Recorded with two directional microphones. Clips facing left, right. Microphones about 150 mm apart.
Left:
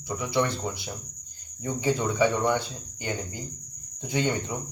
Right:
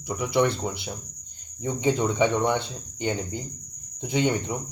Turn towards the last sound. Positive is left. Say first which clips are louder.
# right 3 dB
turn(degrees=-20)  # may be behind; listen again after turning